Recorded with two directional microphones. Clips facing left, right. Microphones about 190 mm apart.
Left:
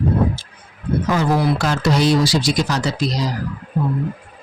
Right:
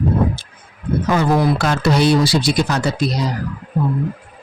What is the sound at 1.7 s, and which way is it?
Speech, 60° right (ahead or behind).